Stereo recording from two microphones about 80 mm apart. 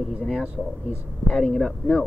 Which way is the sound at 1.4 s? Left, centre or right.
Centre.